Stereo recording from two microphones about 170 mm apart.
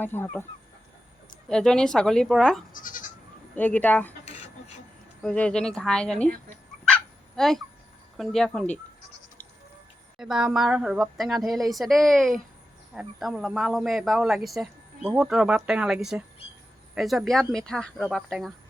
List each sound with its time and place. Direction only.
0.0 s speech: 10° left (ahead or behind)
1.5 s a man's voice: 5° left (ahead or behind)
2.7 s goat: 50° left (ahead or behind)
3.5 s speech: 10° left (ahead or behind)
5.2 s a man's voice: 5° left (ahead or behind)
6.8 s dog: 5° left (ahead or behind)
8.1 s a man's voice: centre (ahead or behind)
10.2 s a man's voice: 5° right (ahead or behind)